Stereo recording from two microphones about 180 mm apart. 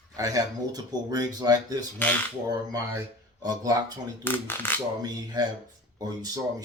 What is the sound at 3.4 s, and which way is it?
Speech, 20° right (ahead or behind).